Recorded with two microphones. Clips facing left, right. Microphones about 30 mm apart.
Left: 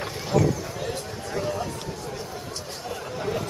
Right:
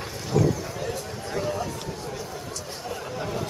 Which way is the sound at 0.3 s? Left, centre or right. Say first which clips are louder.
Even; centre.